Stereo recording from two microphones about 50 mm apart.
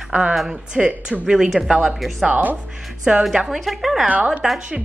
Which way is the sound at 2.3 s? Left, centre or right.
Right.